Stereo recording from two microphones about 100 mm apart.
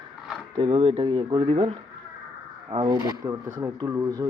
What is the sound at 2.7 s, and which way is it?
Speech, 55° right (ahead or behind).